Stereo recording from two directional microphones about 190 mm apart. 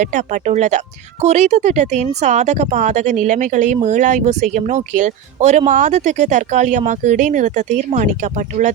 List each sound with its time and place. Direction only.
0.0 s speech: 40° right (ahead or behind)